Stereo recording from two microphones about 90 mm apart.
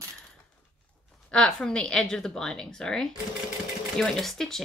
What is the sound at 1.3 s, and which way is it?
A woman's voice, 5° left (ahead or behind).